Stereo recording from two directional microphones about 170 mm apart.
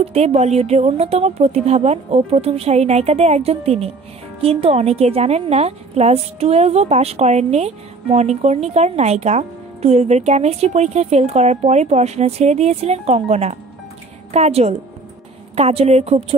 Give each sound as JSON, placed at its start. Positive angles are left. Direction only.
{"t": 0.0, "sound": "a woman's voice", "side_deg": -35}